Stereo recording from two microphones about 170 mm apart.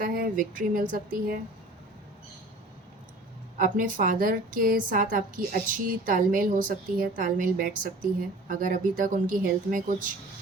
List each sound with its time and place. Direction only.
0.0 s speech: 55° right (ahead or behind)
3.6 s a woman's voice: 50° right (ahead or behind)